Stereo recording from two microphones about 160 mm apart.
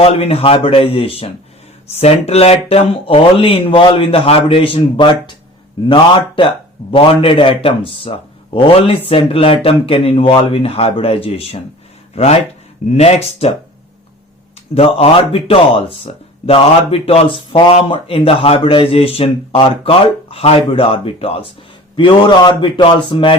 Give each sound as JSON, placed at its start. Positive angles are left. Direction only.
{"t": 0.0, "sound": "speech", "side_deg": 40}
{"t": 14.8, "sound": "speech", "side_deg": 35}